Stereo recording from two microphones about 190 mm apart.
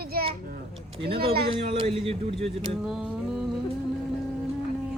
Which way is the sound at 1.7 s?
30° right (ahead or behind).